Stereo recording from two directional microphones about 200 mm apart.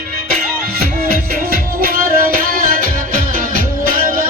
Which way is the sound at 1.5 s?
45° right (ahead or behind).